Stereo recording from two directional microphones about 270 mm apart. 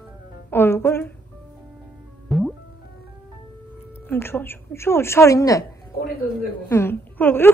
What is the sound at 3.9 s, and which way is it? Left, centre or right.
A woman's voice, centre.